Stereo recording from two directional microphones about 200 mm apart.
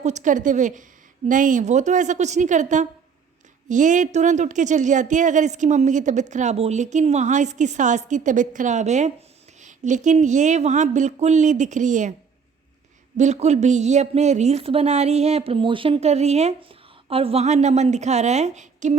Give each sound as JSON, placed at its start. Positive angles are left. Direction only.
{"t": 0.0, "sound": "speech", "side_deg": -35}
{"t": 13.1, "sound": "a woman's voice", "side_deg": -35}